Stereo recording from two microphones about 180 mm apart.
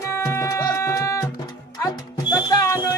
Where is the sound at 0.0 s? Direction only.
15° left (ahead or behind).